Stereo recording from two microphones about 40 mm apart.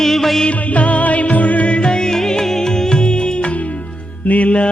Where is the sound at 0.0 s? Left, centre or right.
Centre.